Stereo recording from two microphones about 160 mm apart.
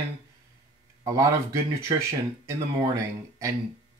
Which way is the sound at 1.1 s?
20° right (ahead or behind).